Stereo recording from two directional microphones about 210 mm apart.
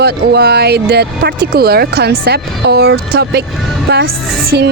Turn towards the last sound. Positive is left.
turn(degrees=-50)  # may be behind; listen again after turning